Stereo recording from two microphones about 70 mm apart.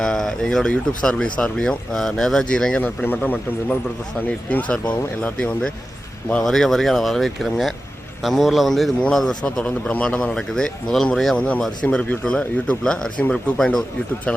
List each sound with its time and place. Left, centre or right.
0.0 s speech: centre
2.8 s speech: left
6.4 s speech: centre